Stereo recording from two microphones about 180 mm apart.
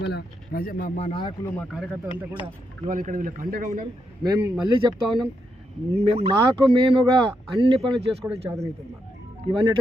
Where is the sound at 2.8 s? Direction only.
45° right (ahead or behind).